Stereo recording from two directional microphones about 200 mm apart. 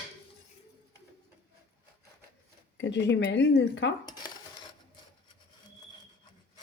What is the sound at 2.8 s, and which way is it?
Speech, 60° left (ahead or behind).